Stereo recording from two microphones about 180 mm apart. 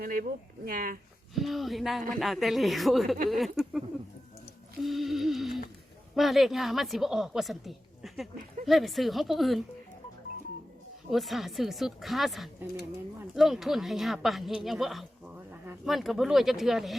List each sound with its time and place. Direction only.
0.0 s speech: 55° right (ahead or behind)
1.4 s a woman's voice: centre (ahead or behind)
4.8 s music: centre (ahead or behind)
6.1 s a woman's voice: centre (ahead or behind)
11.1 s a woman's voice: centre (ahead or behind)